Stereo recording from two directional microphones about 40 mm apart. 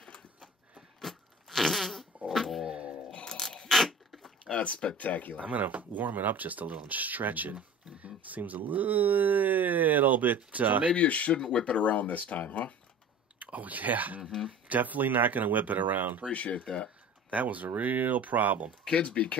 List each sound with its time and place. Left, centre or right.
1.0 s a sound: centre
2.6 s music: right
3.1 s a sound: centre
3.4 s zipper: centre
4.5 s speech: left
4.9 s speech: left
5.4 s speech: right
11.0 s speech: left
11.8 s speech: left
13.4 s speech: right
16.3 s speech: left
17.3 s speech: right
18.9 s speech: left